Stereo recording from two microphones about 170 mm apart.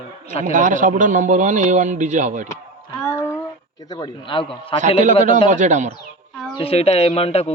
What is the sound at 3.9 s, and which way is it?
Speech, 25° left (ahead or behind).